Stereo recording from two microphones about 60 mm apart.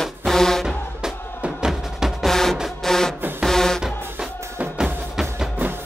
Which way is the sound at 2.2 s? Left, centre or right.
Centre.